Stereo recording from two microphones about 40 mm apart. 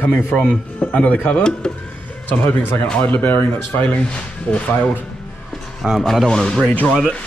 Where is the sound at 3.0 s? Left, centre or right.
Left.